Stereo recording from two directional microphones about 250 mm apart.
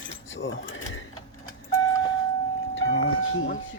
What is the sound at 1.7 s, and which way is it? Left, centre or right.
Vehicle, centre.